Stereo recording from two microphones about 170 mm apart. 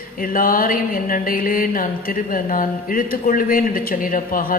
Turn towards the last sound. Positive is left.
turn(degrees=55)  # may be behind; listen again after turning